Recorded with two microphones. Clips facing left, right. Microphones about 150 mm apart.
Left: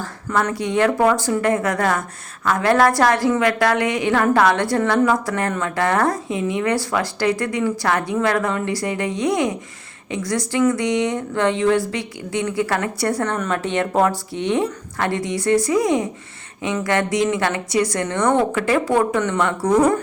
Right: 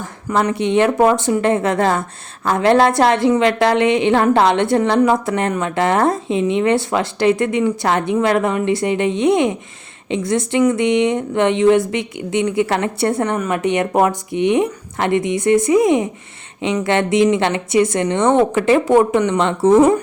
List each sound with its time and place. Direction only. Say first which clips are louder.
0.0 s speech: right 3 dB; 15° right (ahead or behind)